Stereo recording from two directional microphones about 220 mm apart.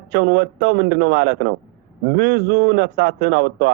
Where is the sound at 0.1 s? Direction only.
50° right (ahead or behind).